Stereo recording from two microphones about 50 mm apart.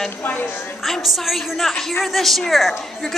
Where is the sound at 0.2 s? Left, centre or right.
Left.